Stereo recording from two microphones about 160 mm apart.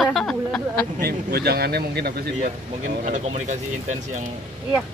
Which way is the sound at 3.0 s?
45° right (ahead or behind).